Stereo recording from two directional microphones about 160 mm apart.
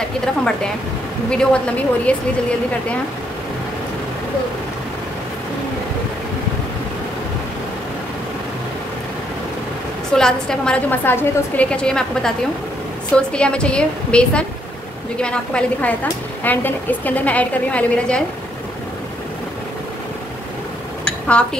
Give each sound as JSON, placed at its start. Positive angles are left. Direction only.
{"t": 1.3, "sound": "a woman's voice", "side_deg": 5}
{"t": 10.1, "sound": "a woman's voice", "side_deg": 5}
{"t": 21.0, "sound": "dishes", "side_deg": 5}